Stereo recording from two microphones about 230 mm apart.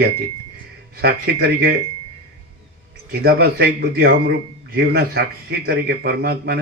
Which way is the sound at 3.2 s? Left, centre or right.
Right.